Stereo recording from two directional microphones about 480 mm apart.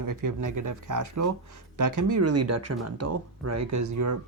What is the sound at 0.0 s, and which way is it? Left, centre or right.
Speech, right.